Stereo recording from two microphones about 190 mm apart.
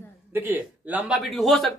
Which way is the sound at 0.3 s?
10° right (ahead or behind).